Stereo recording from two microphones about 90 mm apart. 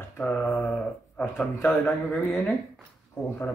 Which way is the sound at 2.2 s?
20° left (ahead or behind).